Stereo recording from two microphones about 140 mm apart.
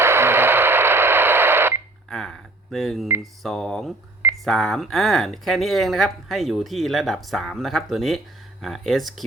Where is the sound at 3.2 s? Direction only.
5° left (ahead or behind).